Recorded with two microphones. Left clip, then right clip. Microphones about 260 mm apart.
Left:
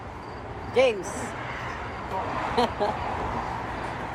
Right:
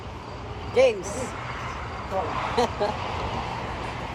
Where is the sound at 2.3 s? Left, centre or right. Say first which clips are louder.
Right 1 dB; left.